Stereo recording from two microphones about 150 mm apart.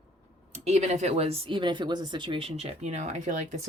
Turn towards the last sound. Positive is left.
turn(degrees=-50)  # may be behind; listen again after turning